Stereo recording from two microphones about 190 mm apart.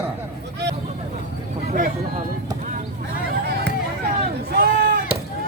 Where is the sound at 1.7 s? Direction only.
45° right (ahead or behind).